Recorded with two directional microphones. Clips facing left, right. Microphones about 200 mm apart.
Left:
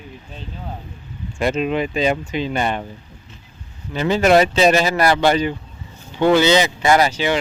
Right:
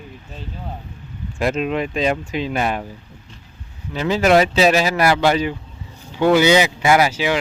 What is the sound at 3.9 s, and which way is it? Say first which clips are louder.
Speech: left 1 dB; centre (ahead or behind).